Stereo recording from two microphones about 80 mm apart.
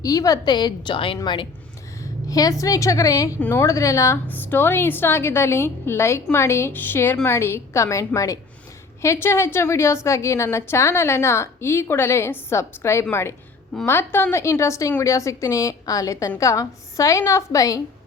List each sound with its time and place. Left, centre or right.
0.0 s a woman's voice: left
0.5 s a woman's voice: left
2.3 s a woman's voice: left
4.3 s a woman's voice: left
9.2 s a woman's voice: left